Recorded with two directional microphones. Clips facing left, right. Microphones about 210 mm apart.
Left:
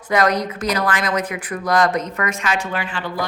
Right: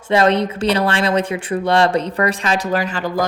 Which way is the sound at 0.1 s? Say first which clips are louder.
Right 3 dB; 25° right (ahead or behind).